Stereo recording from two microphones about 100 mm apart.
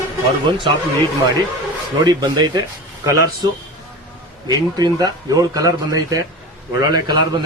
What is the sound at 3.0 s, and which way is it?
Speech, 30° right (ahead or behind).